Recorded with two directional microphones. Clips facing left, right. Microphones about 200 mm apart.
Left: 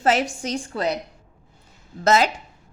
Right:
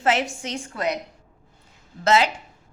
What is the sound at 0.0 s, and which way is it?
Speech, 40° left (ahead or behind).